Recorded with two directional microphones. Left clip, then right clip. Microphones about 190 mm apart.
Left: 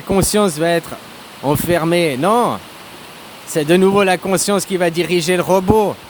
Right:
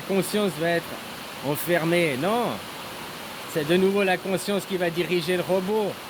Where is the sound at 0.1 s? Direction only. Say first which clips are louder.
Left 10 dB; 40° left (ahead or behind).